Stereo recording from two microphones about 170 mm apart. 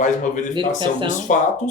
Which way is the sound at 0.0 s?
45° left (ahead or behind).